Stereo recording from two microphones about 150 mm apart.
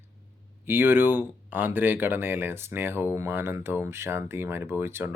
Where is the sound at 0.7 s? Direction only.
15° right (ahead or behind).